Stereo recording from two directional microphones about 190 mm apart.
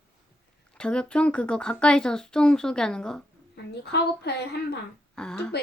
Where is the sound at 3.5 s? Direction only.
60° left (ahead or behind).